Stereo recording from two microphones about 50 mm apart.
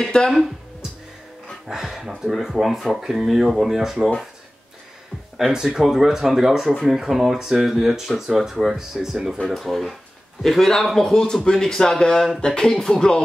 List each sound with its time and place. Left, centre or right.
0.0 s music: centre
1.7 s speech: centre
5.5 s speech: centre
9.6 s a man's voice: centre
11.0 s music: centre